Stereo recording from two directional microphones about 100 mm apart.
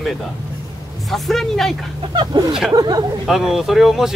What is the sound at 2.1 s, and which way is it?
Speech, 50° right (ahead or behind).